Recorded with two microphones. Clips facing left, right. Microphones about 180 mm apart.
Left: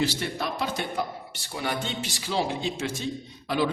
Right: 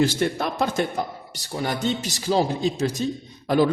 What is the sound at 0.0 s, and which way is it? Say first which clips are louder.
A man's voice: right 6 dB; 50° right (ahead or behind).